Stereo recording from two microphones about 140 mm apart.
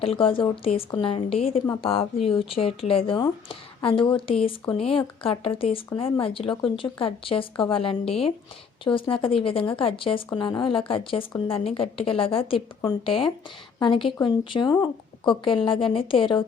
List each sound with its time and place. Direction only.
0.0 s speech: 40° left (ahead or behind)